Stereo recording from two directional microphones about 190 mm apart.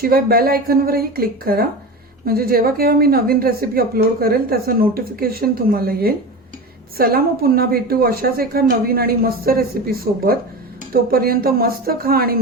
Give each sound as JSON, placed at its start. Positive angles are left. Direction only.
{"t": 0.0, "sound": "speech", "side_deg": -55}